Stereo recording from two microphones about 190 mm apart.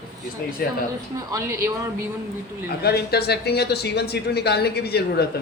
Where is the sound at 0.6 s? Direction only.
50° left (ahead or behind).